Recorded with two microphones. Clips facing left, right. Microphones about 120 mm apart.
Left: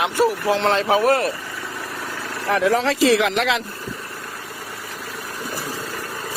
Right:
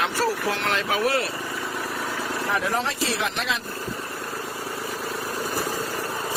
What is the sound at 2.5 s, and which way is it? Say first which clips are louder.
Speech: left 9 dB; 85° left.